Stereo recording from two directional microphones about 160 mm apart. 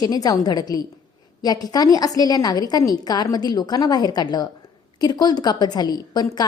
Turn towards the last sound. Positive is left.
turn(degrees=25)  # may be behind; listen again after turning